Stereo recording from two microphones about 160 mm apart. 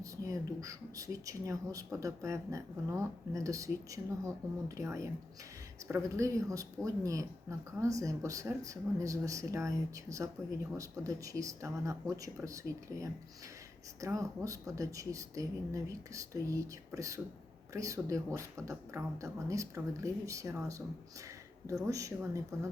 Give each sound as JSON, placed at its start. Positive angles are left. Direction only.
{"t": 0.0, "sound": "speech", "side_deg": -20}